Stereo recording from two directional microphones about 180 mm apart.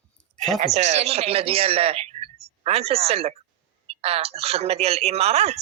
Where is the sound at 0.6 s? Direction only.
40° right (ahead or behind).